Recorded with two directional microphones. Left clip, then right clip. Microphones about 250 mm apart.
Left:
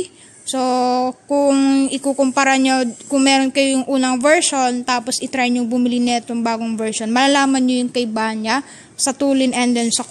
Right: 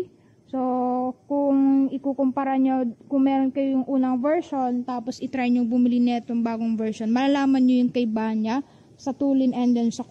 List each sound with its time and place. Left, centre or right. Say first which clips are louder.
0.5 s a sound: left 8 dB; left
5.0 s a woman's voice: left 8 dB; centre
9.0 s a woman's voice: left 7 dB; left
9.4 s a woman's voice: left 6 dB; centre